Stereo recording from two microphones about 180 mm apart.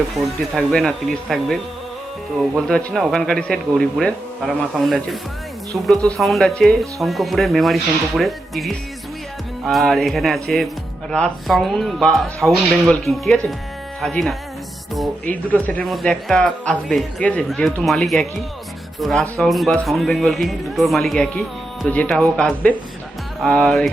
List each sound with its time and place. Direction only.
0.5 s speech: centre (ahead or behind)